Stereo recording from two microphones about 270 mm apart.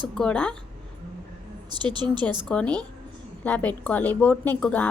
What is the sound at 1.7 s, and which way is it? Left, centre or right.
Speech, centre.